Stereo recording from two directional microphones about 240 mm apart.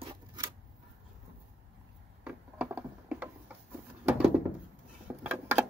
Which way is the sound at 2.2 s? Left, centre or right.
Centre.